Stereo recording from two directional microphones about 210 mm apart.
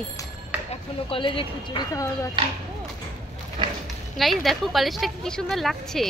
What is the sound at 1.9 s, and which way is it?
Speech, 15° left (ahead or behind).